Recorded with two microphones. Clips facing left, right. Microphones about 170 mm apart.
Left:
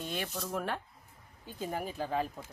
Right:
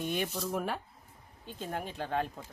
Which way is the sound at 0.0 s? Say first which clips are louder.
Right 4 dB; 15° right (ahead or behind).